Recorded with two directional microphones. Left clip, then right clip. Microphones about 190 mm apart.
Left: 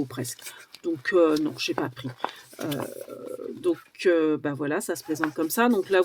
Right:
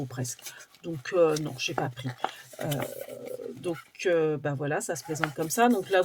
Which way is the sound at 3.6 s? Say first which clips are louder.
Left 7 dB; 40° left (ahead or behind).